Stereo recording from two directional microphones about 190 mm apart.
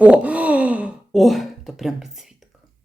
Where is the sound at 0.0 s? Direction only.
5° right (ahead or behind).